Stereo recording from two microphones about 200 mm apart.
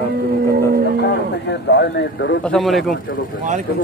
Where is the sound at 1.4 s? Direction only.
60° left (ahead or behind).